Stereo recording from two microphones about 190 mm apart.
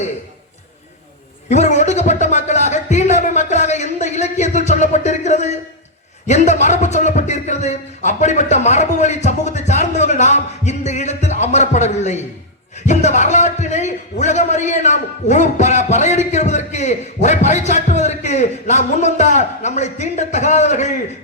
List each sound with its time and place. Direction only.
1.5 s music: 40° left (ahead or behind)
6.2 s a man's voice: 35° left (ahead or behind)